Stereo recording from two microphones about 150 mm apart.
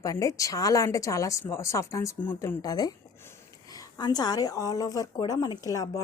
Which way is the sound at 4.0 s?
30° left (ahead or behind).